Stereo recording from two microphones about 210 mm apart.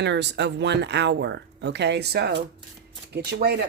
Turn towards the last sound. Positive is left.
turn(degrees=-50)  # may be behind; listen again after turning